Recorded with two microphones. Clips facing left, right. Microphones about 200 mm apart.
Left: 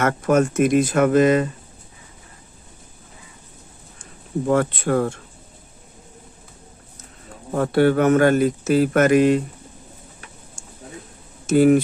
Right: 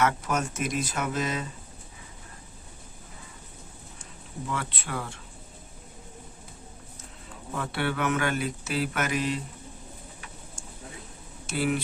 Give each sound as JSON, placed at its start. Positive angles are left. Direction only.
{"t": 0.0, "sound": "speech", "side_deg": 55}
{"t": 4.4, "sound": "speech", "side_deg": 45}
{"t": 6.9, "sound": "speech", "side_deg": 45}
{"t": 11.4, "sound": "speech", "side_deg": 45}